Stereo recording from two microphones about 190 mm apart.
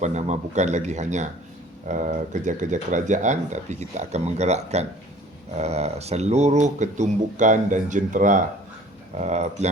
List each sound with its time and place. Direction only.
0.0 s speech: 40° right (ahead or behind)